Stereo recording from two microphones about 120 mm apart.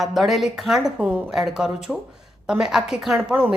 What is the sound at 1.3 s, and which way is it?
A woman's voice, 5° right (ahead or behind).